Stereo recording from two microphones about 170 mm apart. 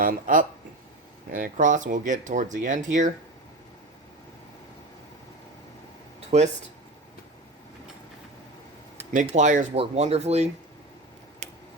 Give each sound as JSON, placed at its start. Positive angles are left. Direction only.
{"t": 0.0, "sound": "speech", "side_deg": -55}
{"t": 6.1, "sound": "a sound", "side_deg": -40}
{"t": 9.2, "sound": "speech", "side_deg": -45}